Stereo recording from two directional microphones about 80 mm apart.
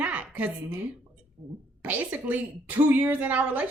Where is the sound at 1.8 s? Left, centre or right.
Centre.